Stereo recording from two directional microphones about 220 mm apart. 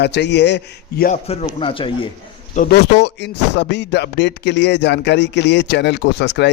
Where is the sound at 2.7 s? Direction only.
50° left (ahead or behind).